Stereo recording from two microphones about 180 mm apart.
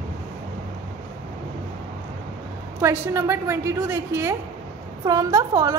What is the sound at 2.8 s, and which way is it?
A woman's voice, 15° right (ahead or behind).